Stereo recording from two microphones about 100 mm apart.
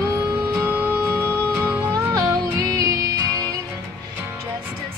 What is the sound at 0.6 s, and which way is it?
Music, 15° right (ahead or behind).